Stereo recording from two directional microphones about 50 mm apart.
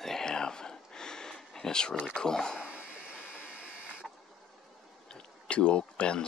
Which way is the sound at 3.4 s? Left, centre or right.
Right.